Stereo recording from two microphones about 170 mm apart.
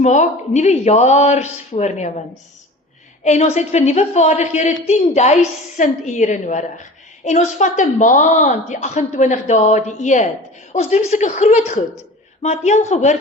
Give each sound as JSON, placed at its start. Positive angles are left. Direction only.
{"t": 0.0, "sound": "speech", "side_deg": 45}
{"t": 3.2, "sound": "a woman's voice", "side_deg": 40}